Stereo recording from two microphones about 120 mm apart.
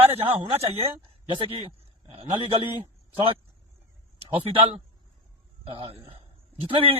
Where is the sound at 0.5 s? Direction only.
55° right (ahead or behind).